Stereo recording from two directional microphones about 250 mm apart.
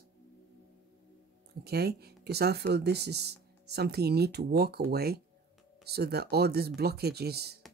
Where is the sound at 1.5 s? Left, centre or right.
Right.